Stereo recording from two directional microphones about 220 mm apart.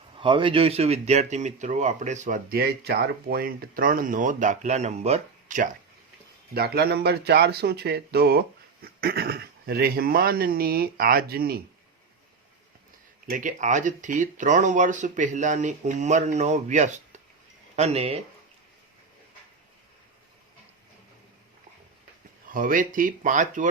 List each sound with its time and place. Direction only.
0.2 s speech: 25° right (ahead or behind); by 11.6 s 45° right (ahead or behind)
13.2 s speech: 35° right (ahead or behind)
22.4 s speech: 40° right (ahead or behind)